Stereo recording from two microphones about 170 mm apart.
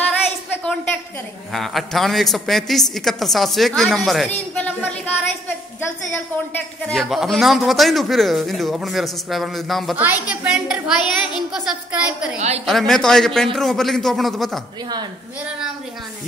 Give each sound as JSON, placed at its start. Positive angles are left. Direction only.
{"t": 1.5, "sound": "a woman's voice", "side_deg": 0}
{"t": 6.5, "sound": "a woman's voice", "side_deg": 0}
{"t": 12.4, "sound": "a woman's voice", "side_deg": -40}
{"t": 12.6, "sound": "a woman's voice", "side_deg": 0}